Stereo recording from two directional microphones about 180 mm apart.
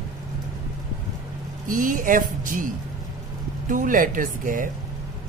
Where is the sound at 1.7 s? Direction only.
50° right (ahead or behind).